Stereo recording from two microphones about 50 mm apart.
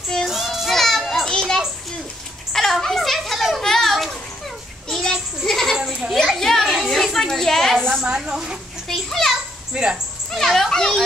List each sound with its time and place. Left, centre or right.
0.2 s child singing: centre
2.5 s children playing: centre
4.8 s a sound: centre
6.1 s children playing: centre
6.9 s a sound: centre
7.9 s a sound: centre
8.8 s children playing: centre
9.8 s speech: centre
10.3 s a child's voice: centre